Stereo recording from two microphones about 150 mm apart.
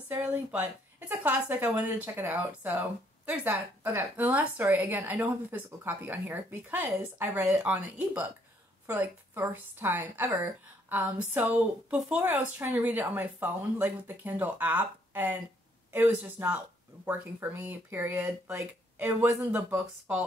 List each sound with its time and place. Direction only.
0.1 s a woman's voice: 15° right (ahead or behind)